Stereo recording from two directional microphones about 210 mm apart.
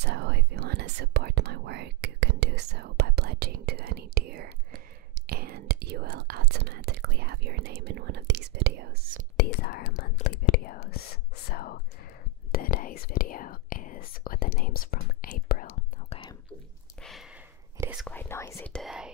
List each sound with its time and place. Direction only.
0.0 s whispering: 55° right (ahead or behind)
9.4 s whispering: 50° left (ahead or behind)
17.0 s a sound: centre (ahead or behind)
17.7 s whispering: 10° right (ahead or behind)
18.0 s whispering: 10° left (ahead or behind)